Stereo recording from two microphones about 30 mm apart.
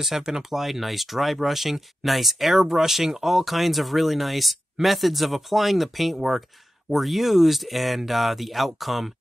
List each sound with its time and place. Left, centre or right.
0.2 s speech: centre
0.6 s speech: centre